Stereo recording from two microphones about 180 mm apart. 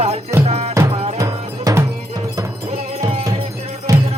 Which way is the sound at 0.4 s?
35° right (ahead or behind).